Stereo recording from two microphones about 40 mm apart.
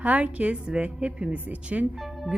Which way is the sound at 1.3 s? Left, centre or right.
Right.